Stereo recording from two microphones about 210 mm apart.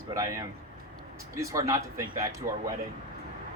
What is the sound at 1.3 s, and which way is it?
Speech, 15° right (ahead or behind).